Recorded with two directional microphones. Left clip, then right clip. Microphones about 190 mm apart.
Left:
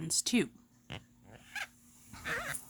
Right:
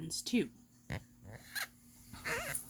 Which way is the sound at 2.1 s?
10° left (ahead or behind).